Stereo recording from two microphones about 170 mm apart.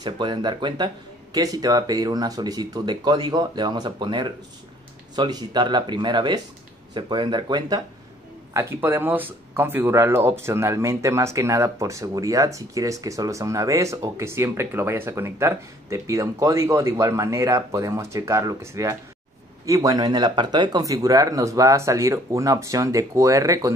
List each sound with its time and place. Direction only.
0.0 s speech: 25° right (ahead or behind)
8.5 s speech: 15° right (ahead or behind)